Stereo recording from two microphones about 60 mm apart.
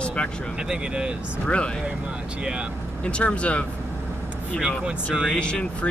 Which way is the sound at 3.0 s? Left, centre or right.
Centre.